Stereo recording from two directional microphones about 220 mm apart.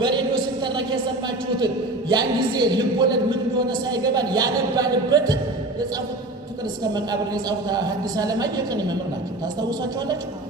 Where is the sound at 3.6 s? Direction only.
20° right (ahead or behind).